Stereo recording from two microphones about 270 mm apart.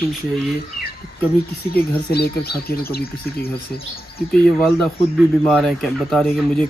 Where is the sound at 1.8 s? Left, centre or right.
Left.